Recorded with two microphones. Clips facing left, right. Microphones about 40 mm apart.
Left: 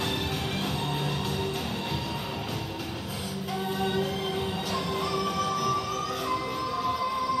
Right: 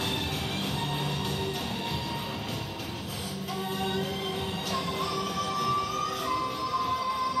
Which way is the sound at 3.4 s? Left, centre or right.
Centre.